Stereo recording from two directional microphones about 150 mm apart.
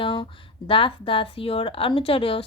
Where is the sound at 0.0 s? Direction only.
35° left (ahead or behind).